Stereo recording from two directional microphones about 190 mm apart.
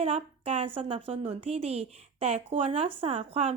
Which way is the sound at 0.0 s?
30° right (ahead or behind).